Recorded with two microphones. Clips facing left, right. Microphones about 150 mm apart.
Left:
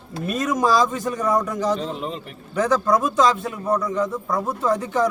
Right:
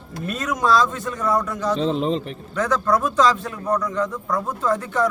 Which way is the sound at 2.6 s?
10° left (ahead or behind).